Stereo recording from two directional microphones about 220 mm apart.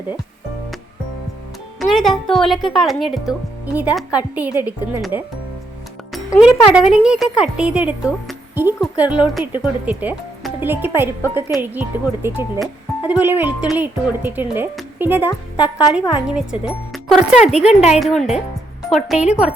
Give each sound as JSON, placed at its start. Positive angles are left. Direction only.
{"t": 1.8, "sound": "speech", "side_deg": 0}
{"t": 17.5, "sound": "speech", "side_deg": 30}
{"t": 17.9, "sound": "speech", "side_deg": 0}